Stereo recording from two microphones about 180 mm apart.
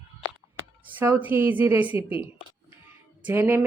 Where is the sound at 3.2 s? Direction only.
10° right (ahead or behind).